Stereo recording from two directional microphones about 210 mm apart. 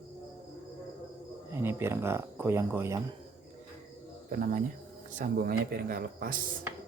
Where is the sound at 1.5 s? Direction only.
10° right (ahead or behind).